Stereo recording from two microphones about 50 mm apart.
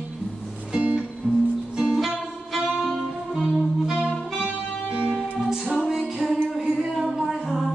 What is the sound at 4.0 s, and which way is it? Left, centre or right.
Music, right.